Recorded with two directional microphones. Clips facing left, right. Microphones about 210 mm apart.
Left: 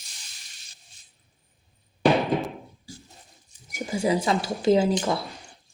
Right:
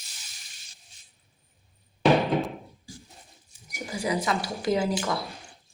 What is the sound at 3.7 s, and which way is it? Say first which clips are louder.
Speech: left 5 dB; 25° left (ahead or behind).